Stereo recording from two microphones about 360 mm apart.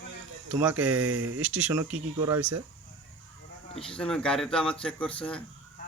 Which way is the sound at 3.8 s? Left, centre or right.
Centre.